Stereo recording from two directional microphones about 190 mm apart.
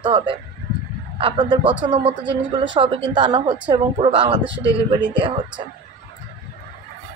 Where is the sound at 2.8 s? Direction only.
25° right (ahead or behind).